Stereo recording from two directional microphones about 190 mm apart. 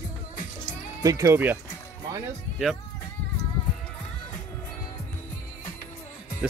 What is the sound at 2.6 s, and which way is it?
Speech, centre (ahead or behind).